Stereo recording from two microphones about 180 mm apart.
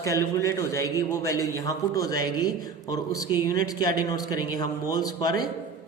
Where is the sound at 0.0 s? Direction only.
15° left (ahead or behind).